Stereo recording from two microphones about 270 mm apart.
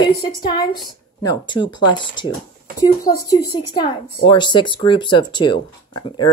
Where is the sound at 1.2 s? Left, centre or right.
Centre.